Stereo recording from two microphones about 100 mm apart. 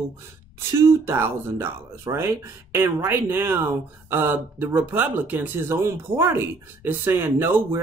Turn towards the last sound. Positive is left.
turn(degrees=-20)  # may be behind; listen again after turning